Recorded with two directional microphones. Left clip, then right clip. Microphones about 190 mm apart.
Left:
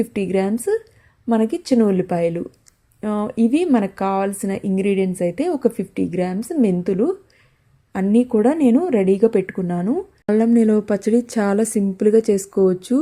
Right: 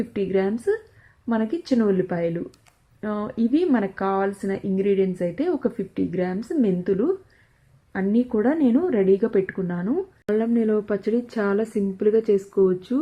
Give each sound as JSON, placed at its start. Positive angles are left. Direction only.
{"t": 0.1, "sound": "speech", "side_deg": 20}
{"t": 10.2, "sound": "a woman's voice", "side_deg": 40}